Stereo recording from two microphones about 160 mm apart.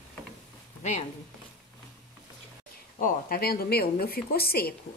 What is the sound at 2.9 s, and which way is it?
A woman's voice, 60° left (ahead or behind).